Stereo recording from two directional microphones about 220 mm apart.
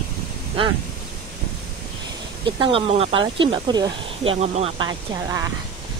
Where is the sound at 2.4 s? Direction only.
25° right (ahead or behind).